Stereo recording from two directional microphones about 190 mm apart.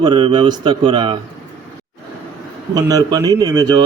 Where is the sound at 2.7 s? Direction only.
20° right (ahead or behind).